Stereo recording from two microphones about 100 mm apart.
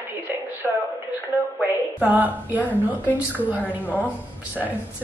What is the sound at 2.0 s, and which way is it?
Speech, 15° right (ahead or behind).